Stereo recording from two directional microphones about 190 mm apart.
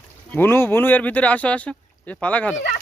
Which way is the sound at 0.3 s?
10° left (ahead or behind).